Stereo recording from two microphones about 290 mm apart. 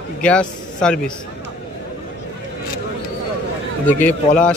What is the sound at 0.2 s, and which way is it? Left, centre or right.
Speech, centre.